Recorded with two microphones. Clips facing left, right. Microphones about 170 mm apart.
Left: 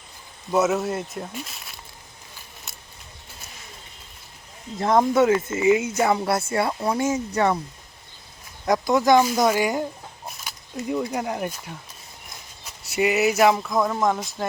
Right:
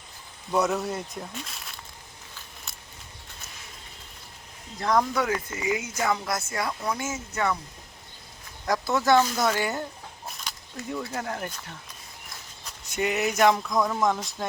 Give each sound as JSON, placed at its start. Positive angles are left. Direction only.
{"t": 0.5, "sound": "speech", "side_deg": 5}
{"t": 4.8, "sound": "speech", "side_deg": 25}
{"t": 8.6, "sound": "speech", "side_deg": 20}